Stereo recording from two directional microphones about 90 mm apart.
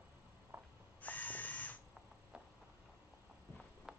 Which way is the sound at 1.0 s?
15° left (ahead or behind).